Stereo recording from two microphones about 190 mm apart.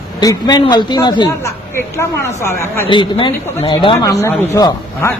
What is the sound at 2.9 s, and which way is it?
A man's voice, 25° left (ahead or behind).